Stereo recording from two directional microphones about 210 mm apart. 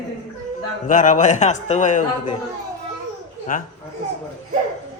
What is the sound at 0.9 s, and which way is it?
A man's voice, 35° left (ahead or behind).